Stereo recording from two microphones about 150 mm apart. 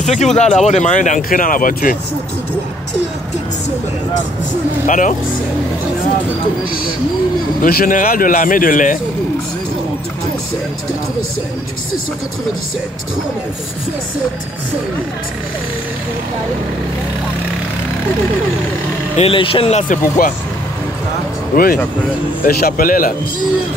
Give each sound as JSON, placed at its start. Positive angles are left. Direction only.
{"t": 0.0, "sound": "speech", "side_deg": 50}
{"t": 4.8, "sound": "speech", "side_deg": 60}
{"t": 7.6, "sound": "speech", "side_deg": 65}
{"t": 19.1, "sound": "speech", "side_deg": 40}
{"t": 19.9, "sound": "speech", "side_deg": 60}
{"t": 22.4, "sound": "speech", "side_deg": 85}